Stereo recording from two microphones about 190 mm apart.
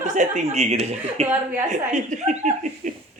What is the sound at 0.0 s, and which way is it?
Speech, 40° right (ahead or behind).